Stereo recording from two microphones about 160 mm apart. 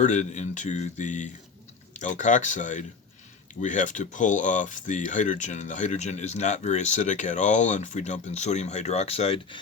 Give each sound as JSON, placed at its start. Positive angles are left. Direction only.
{"t": 0.0, "sound": "speech", "side_deg": 50}